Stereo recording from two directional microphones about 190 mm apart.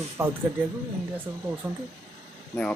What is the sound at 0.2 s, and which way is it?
Speech, 10° right (ahead or behind).